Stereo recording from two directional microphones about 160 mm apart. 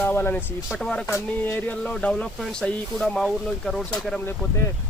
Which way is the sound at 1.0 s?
15° left (ahead or behind).